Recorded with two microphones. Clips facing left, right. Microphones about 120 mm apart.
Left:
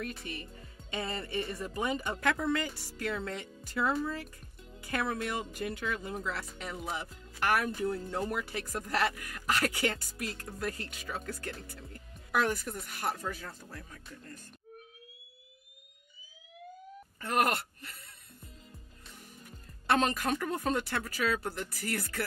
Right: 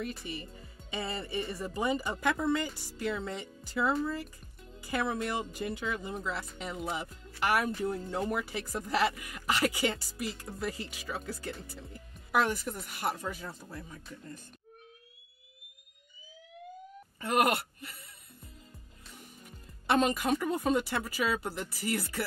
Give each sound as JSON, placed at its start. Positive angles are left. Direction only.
{"t": 0.0, "sound": "speech", "side_deg": 0}
{"t": 13.1, "sound": "speech", "side_deg": -20}
{"t": 19.9, "sound": "speech", "side_deg": 0}